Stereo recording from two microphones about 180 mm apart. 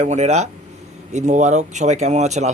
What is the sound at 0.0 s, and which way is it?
Speech, 40° right (ahead or behind).